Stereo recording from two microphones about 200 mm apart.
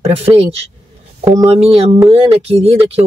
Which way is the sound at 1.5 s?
30° right (ahead or behind).